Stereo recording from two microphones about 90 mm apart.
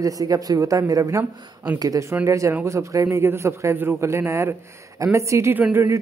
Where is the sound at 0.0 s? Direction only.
40° right (ahead or behind).